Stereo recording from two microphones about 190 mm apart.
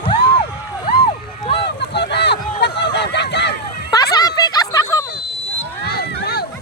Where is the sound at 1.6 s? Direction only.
60° left (ahead or behind).